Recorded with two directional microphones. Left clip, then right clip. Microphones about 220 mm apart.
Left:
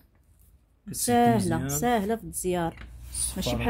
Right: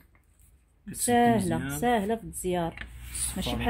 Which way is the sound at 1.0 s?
Centre (ahead or behind).